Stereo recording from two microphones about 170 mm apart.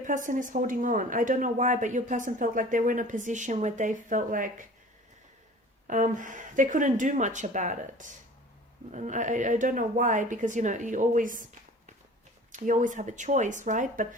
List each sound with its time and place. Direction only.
0.0 s speech: 50° right (ahead or behind)
5.9 s speech: 50° right (ahead or behind)
12.5 s speech: 50° right (ahead or behind)